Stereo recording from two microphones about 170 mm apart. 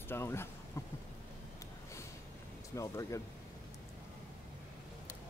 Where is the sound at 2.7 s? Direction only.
20° left (ahead or behind).